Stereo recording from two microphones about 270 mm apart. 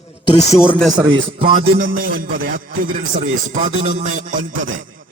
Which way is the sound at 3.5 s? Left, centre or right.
Right.